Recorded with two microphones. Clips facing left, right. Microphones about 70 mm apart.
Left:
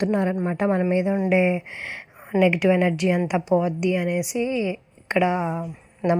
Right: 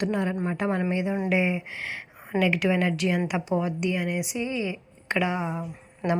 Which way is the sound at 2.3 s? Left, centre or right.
Centre.